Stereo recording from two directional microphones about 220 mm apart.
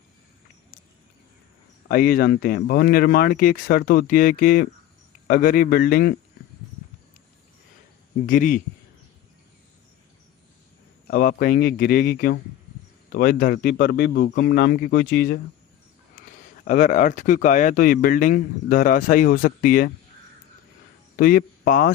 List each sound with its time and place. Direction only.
1.9 s speech: 45° left (ahead or behind)
8.3 s speech: 35° left (ahead or behind)
11.1 s speech: 40° left (ahead or behind)
16.1 s speech: 35° left (ahead or behind)
21.2 s speech: 45° left (ahead or behind)